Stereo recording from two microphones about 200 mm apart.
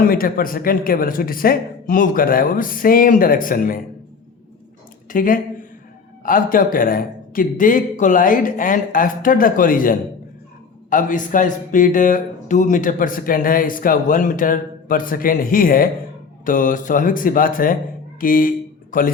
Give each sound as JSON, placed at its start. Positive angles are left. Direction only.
{"t": 0.0, "sound": "speech", "side_deg": 45}
{"t": 5.0, "sound": "speech", "side_deg": 45}